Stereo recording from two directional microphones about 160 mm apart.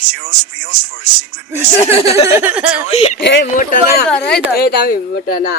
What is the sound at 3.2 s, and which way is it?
Speech, 75° left (ahead or behind).